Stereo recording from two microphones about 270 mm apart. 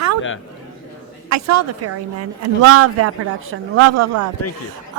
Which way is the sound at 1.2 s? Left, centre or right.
Right.